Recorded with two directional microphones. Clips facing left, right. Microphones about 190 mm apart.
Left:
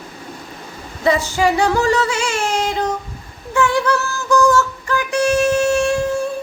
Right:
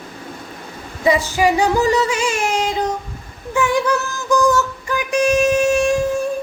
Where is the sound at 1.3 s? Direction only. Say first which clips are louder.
Even; 15° right (ahead or behind).